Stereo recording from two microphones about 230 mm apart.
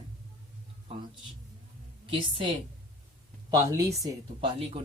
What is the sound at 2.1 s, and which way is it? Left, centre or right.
Speech, right.